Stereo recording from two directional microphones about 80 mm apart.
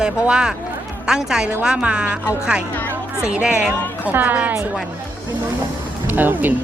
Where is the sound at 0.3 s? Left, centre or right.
Centre.